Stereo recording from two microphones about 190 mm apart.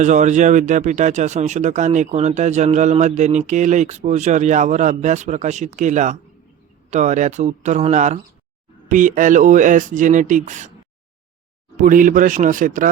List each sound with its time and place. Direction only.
0.0 s speech: 40° right (ahead or behind)
11.8 s speech: 45° right (ahead or behind)